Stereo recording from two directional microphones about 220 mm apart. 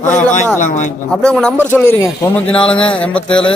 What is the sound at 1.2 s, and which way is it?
Speech, 5° left (ahead or behind).